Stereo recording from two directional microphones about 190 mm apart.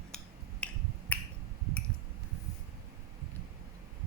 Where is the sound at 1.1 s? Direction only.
10° left (ahead or behind).